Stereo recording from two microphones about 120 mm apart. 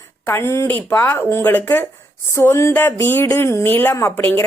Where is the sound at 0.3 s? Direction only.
20° left (ahead or behind).